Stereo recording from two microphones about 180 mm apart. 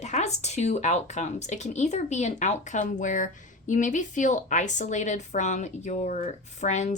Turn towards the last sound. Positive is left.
turn(degrees=40)  # may be behind; listen again after turning